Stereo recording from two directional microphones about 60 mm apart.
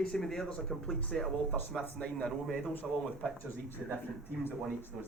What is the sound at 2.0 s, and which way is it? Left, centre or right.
Speech, centre.